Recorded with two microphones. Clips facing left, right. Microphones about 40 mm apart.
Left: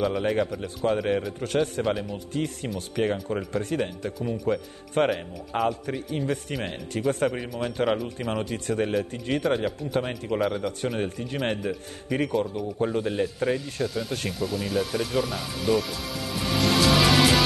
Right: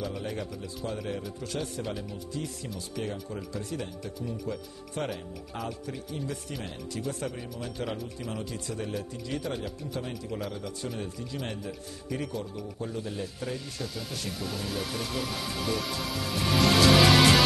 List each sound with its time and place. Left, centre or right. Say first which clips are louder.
0.2 s speech: left 10 dB; left
13.8 s speech: left 7 dB; centre